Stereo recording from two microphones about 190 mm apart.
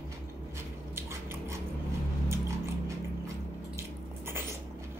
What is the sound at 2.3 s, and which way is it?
Biting, 15° right (ahead or behind).